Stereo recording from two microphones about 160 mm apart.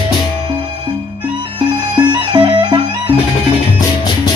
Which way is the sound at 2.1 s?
30° right (ahead or behind).